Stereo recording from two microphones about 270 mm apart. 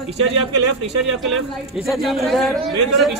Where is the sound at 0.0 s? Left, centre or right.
Centre.